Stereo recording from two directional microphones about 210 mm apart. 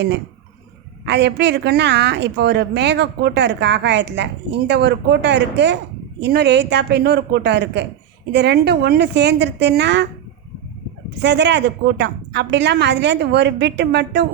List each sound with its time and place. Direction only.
1.0 s a woman's voice: 55° right (ahead or behind)
11.2 s a woman's voice: 55° right (ahead or behind)